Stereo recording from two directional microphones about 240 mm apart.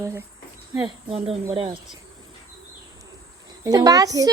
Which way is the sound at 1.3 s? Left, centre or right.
Right.